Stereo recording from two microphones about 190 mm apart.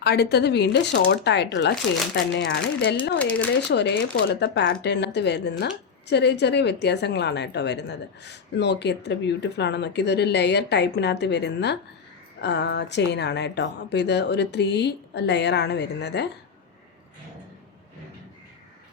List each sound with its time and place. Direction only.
0.0 s a woman's voice: 60° left (ahead or behind)
3.2 s speech: 5° left (ahead or behind)
3.7 s a woman's voice: 65° left (ahead or behind)